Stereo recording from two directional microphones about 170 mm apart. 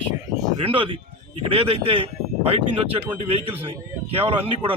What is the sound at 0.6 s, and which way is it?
Speech, 30° right (ahead or behind).